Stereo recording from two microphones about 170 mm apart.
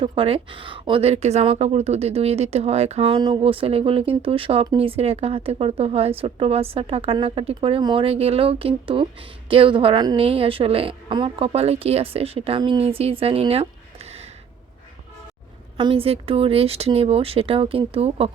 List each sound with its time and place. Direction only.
0.0 s speech: 35° right (ahead or behind)
15.8 s speech: 30° right (ahead or behind)